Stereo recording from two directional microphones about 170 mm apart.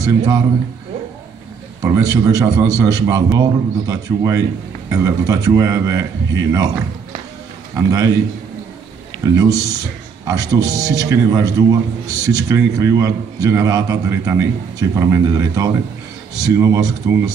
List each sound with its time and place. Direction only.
0.0 s a man's voice: 20° right (ahead or behind)
1.8 s a man's voice: 20° right (ahead or behind)
7.7 s a man's voice: 20° right (ahead or behind)
9.2 s a man's voice: 20° right (ahead or behind)